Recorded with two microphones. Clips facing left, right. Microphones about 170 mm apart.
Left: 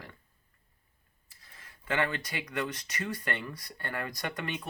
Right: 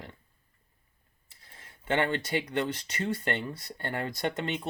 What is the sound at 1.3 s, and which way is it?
Speech, 25° right (ahead or behind).